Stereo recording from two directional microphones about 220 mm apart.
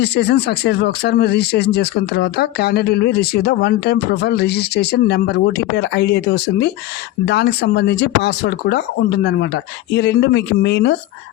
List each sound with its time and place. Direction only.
0.0 s speech: 50° left (ahead or behind)